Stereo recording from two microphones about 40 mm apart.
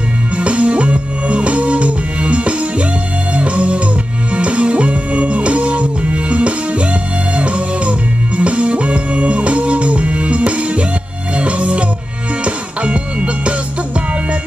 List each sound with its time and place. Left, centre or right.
0.4 s music: right